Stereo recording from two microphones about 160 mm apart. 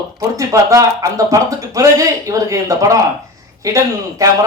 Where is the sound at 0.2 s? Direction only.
20° right (ahead or behind).